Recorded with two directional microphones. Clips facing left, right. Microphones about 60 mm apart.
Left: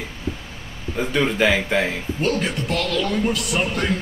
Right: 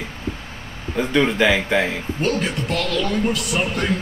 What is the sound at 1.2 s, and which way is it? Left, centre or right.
Speech, centre.